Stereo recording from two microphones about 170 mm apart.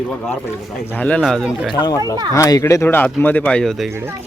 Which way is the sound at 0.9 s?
10° left (ahead or behind).